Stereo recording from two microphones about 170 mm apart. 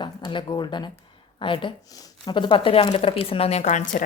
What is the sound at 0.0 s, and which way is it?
A woman's voice, 30° left (ahead or behind).